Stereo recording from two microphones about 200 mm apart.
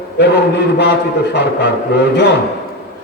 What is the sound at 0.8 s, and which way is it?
A man's voice, 55° left (ahead or behind).